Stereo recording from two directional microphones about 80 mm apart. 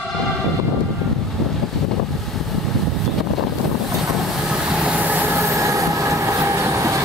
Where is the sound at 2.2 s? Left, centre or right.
Centre.